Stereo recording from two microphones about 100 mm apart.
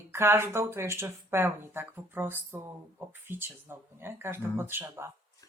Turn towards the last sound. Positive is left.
turn(degrees=-25)  # may be behind; listen again after turning